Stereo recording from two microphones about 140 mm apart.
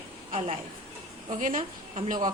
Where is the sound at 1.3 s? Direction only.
70° right (ahead or behind).